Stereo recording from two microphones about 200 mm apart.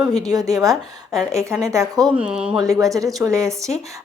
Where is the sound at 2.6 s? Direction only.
15° right (ahead or behind).